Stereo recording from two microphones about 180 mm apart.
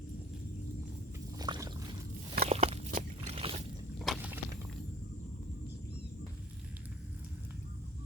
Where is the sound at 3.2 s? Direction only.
30° right (ahead or behind).